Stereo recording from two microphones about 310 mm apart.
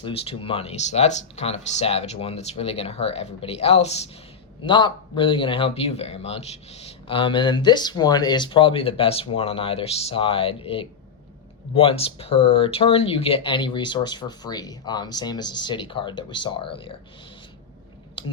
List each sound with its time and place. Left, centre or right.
0.0 s speech: centre